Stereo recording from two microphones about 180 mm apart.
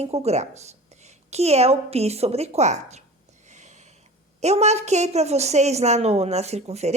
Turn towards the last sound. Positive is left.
turn(degrees=-35)  # may be behind; listen again after turning